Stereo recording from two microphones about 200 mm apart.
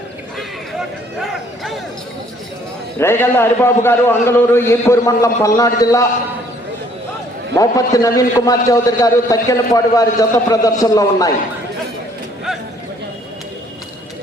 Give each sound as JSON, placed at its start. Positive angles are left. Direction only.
{"t": 0.3, "sound": "a sound", "side_deg": 0}
{"t": 3.0, "sound": "a man's voice", "side_deg": 10}
{"t": 7.5, "sound": "a man's voice", "side_deg": 15}